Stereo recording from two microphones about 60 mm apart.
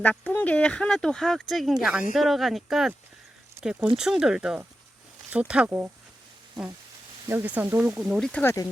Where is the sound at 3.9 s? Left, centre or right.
Centre.